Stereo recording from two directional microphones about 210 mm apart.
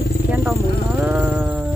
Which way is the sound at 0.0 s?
50° left (ahead or behind).